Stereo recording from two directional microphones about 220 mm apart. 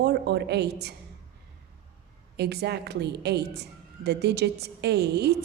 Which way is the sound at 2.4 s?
50° right (ahead or behind).